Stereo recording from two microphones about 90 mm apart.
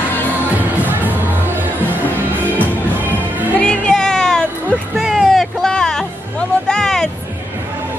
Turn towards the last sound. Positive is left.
turn(degrees=5)  # may be behind; listen again after turning